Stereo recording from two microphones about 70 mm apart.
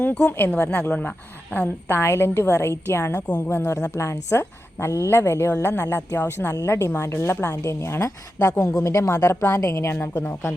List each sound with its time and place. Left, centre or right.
0.0 s speech: centre
1.9 s a woman's voice: left